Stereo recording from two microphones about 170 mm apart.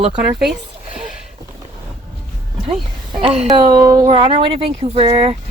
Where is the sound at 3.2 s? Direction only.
40° right (ahead or behind).